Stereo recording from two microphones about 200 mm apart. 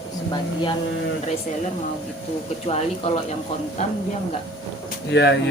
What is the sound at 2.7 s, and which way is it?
Speech, 35° left (ahead or behind).